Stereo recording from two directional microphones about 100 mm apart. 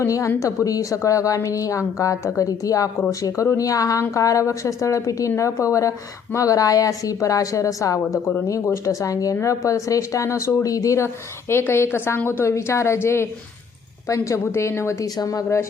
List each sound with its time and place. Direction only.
0.0 s a woman's voice: 30° left (ahead or behind)